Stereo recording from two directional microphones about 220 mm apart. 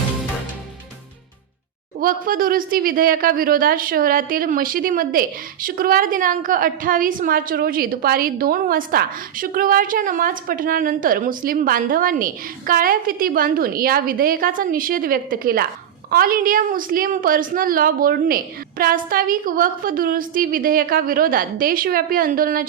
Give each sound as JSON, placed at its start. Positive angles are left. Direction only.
{"t": 2.0, "sound": "a woman's voice", "side_deg": -40}